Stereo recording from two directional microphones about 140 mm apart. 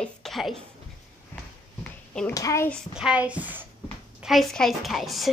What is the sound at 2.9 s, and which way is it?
Speech, 5° right (ahead or behind).